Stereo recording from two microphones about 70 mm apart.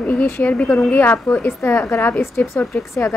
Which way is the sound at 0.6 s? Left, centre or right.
Centre.